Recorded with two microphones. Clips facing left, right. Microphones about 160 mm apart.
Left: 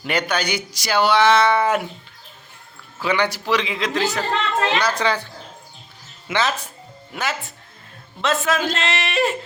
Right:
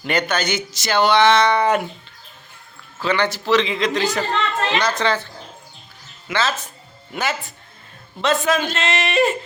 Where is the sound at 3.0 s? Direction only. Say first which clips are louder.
Right 1 dB; 10° left (ahead or behind).